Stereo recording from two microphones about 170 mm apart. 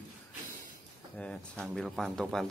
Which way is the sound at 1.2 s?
5° left (ahead or behind).